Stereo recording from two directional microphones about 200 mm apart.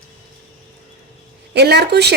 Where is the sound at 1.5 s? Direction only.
55° right (ahead or behind).